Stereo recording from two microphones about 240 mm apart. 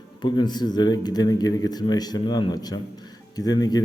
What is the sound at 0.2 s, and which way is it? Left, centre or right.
Speech, centre.